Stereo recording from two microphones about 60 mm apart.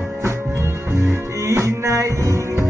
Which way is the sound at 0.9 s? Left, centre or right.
Right.